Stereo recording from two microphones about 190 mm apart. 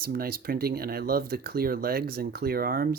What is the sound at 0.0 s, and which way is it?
Speech, 50° right (ahead or behind).